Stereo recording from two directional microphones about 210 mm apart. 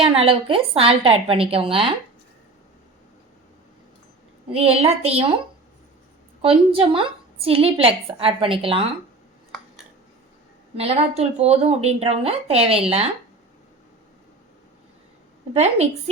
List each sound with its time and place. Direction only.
0.0 s a woman's voice: 25° right (ahead or behind)
4.5 s a woman's voice: 30° right (ahead or behind)
6.4 s a woman's voice: 25° right (ahead or behind)
10.8 s a woman's voice: 30° right (ahead or behind)
15.5 s a woman's voice: 30° right (ahead or behind)